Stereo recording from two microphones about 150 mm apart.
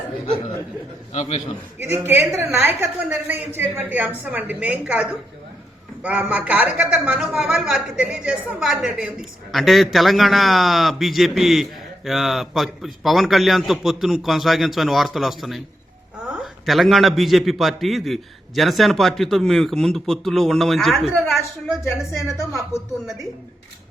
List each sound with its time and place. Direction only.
1.1 s a man's voice: 45° left (ahead or behind)
1.8 s a woman's voice: 15° right (ahead or behind); by 21.0 s centre (ahead or behind)
22.1 s a woman's voice: 15° left (ahead or behind)